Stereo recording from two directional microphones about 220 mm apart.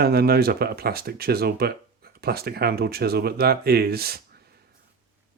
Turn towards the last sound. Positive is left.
turn(degrees=-45)  # may be behind; listen again after turning